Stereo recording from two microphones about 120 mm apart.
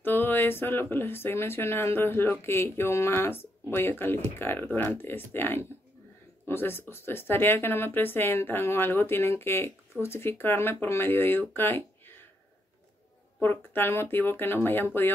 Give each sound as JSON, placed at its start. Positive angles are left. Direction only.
{"t": 0.0, "sound": "speech", "side_deg": 15}
{"t": 13.4, "sound": "speech", "side_deg": 20}